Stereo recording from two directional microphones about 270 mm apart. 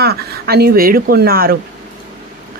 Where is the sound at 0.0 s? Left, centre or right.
Right.